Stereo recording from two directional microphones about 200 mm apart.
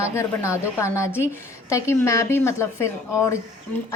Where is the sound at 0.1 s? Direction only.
15° left (ahead or behind).